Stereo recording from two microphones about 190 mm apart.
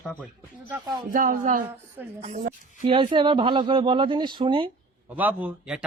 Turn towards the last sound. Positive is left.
turn(degrees=-5)  # may be behind; listen again after turning